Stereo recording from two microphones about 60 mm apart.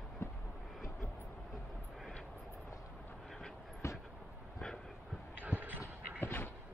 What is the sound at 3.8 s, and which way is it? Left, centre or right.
Vehicle, left.